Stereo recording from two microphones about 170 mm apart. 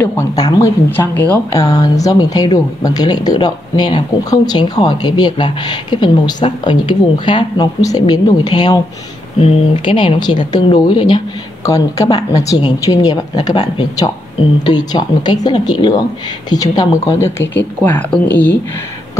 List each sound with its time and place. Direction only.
0.0 s speech: 15° left (ahead or behind)